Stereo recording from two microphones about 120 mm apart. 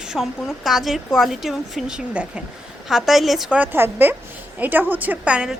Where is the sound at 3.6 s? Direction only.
15° right (ahead or behind).